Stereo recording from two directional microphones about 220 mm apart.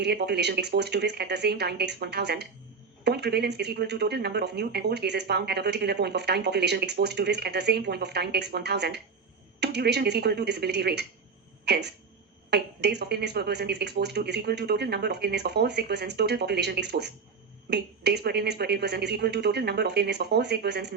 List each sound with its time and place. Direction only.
0.0 s speech: 50° right (ahead or behind)